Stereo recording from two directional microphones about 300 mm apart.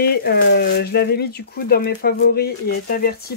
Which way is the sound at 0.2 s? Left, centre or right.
Left.